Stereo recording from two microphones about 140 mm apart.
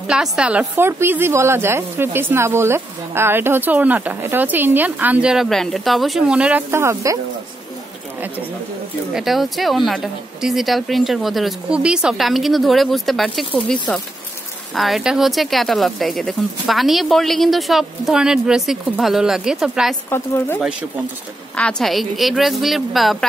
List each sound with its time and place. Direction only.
0.0 s a woman's voice: 5° right (ahead or behind)
9.1 s speech: centre (ahead or behind)
14.7 s speech: centre (ahead or behind)
20.1 s speech: 15° left (ahead or behind)
21.5 s speech: 5° left (ahead or behind)